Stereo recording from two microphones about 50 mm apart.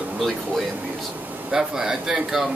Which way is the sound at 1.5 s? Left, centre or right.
Centre.